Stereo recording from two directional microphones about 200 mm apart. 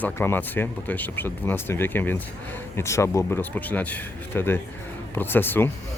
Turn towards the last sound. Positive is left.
turn(degrees=10)  # may be behind; listen again after turning